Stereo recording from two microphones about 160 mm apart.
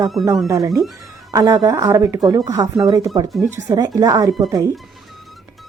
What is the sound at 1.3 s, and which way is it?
Speech, 20° right (ahead or behind).